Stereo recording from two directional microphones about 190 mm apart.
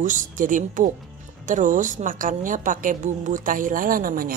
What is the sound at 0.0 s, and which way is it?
A woman's voice, 45° right (ahead or behind).